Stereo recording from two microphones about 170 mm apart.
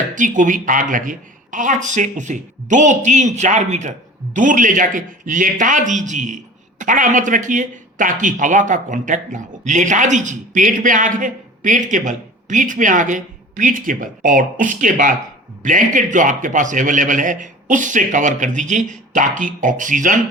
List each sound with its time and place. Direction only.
0.1 s speech: 50° right (ahead or behind)